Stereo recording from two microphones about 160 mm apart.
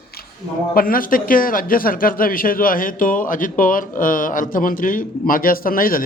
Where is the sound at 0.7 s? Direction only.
60° left (ahead or behind).